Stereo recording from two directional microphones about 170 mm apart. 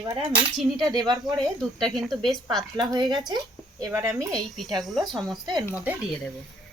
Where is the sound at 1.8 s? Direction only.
Centre (ahead or behind).